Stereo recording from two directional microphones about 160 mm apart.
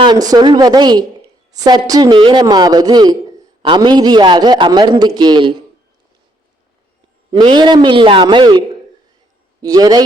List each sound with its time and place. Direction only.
0.0 s a man's voice: 25° right (ahead or behind)
7.3 s a man's voice: 30° right (ahead or behind)